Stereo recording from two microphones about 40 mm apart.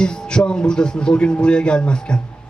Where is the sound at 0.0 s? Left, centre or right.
Centre.